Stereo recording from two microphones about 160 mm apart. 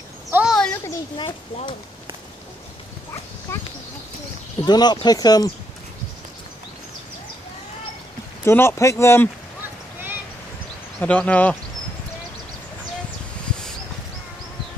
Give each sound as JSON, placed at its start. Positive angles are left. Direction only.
{"t": 0.3, "sound": "a sound", "side_deg": -10}
{"t": 1.1, "sound": "speech", "side_deg": 30}
{"t": 4.6, "sound": "speech", "side_deg": 25}
{"t": 8.5, "sound": "speech", "side_deg": 15}
{"t": 11.0, "sound": "speech", "side_deg": 10}